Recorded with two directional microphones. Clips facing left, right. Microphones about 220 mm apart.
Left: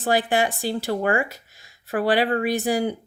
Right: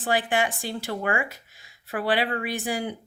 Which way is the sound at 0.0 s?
40° left (ahead or behind).